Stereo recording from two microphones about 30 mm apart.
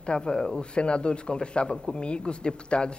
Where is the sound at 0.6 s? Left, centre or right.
Left.